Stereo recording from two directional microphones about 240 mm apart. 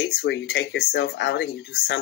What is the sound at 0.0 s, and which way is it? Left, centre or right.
Speech, left.